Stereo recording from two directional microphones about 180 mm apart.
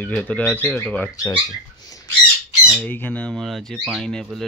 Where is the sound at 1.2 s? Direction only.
20° left (ahead or behind).